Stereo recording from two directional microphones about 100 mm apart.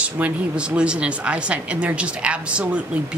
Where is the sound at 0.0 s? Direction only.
10° right (ahead or behind).